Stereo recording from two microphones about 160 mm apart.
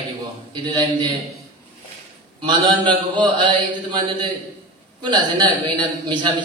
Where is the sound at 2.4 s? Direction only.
30° right (ahead or behind).